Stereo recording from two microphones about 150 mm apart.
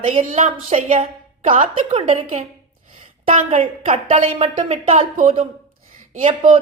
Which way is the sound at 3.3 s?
55° right (ahead or behind).